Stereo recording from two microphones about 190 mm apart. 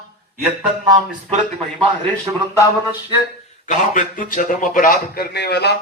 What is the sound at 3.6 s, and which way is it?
A man's voice, 40° left (ahead or behind).